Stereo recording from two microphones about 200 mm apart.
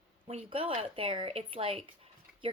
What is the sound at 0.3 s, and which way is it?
A woman's voice, 30° right (ahead or behind).